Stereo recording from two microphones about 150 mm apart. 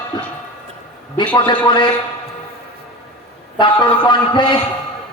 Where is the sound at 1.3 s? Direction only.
30° left (ahead or behind).